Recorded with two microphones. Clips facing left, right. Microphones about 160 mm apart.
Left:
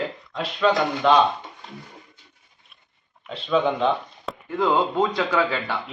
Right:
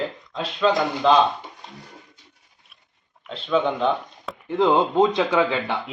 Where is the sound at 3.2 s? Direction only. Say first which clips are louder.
Even; centre (ahead or behind).